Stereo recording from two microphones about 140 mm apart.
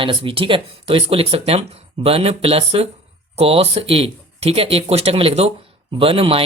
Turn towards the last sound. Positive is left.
turn(degrees=-40)  # may be behind; listen again after turning